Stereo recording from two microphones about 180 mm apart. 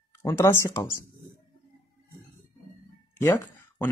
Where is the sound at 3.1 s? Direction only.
15° left (ahead or behind).